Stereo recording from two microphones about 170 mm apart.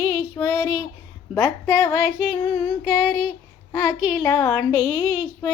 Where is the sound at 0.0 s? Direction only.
15° left (ahead or behind).